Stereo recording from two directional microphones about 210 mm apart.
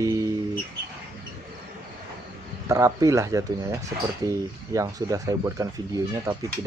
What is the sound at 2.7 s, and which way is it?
Speech, 15° right (ahead or behind).